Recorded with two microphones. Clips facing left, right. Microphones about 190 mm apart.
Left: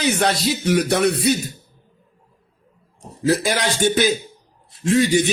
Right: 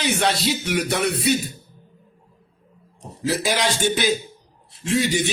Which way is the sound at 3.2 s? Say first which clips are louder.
Left 3 dB; 50° left (ahead or behind).